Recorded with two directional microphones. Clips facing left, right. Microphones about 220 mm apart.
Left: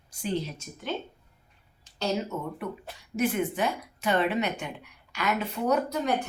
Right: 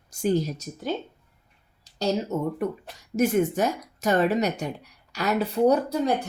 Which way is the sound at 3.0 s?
45° right (ahead or behind).